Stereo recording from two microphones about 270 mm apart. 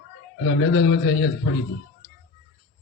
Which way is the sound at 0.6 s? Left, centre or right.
Left.